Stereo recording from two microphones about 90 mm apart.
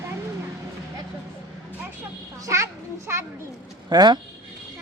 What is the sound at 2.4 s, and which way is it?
Children playing, 35° right (ahead or behind).